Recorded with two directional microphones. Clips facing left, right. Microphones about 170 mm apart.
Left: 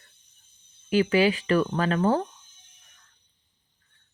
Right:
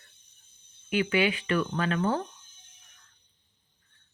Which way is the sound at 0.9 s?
35° left (ahead or behind).